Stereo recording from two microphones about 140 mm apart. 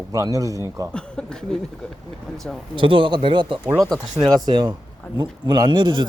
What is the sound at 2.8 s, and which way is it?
A man's voice, 35° right (ahead or behind).